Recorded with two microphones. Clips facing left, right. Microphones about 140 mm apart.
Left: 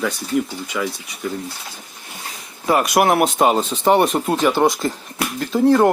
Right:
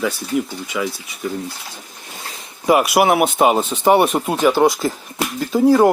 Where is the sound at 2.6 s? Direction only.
10° right (ahead or behind).